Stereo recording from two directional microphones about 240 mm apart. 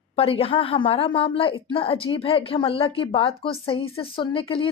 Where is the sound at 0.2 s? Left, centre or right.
Left.